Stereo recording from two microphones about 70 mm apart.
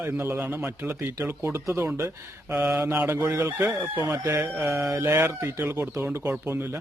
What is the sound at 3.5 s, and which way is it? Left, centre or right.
Speech, right.